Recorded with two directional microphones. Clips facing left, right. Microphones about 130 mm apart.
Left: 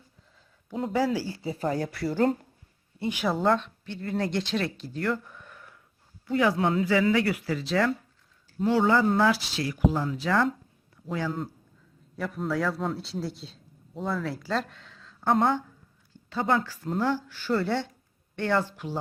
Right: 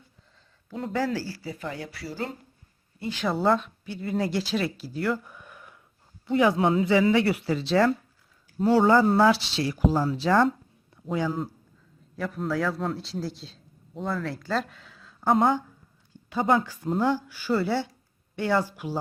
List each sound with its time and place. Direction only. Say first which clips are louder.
0.9 s speech: left 1 dB; 10° left (ahead or behind)
1.5 s speech: left 7 dB; 40° left (ahead or behind)
3.0 s speech: left 2 dB; 15° left (ahead or behind)
3.2 s speech: right 1 dB; centre (ahead or behind); by 10.5 s 30° right (ahead or behind)
10.9 s a sound: right 3 dB; 25° right (ahead or behind)
12.1 s a man's voice: right 1 dB; centre (ahead or behind)